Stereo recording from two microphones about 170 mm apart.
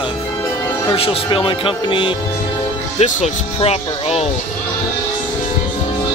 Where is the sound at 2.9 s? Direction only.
45° left (ahead or behind).